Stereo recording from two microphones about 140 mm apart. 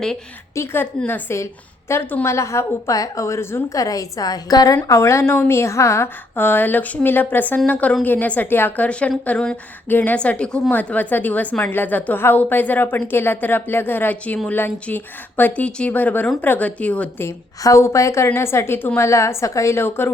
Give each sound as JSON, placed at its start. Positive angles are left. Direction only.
{"t": 0.5, "sound": "a woman's voice", "side_deg": 20}